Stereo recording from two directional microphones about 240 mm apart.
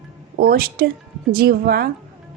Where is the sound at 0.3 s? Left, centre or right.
Right.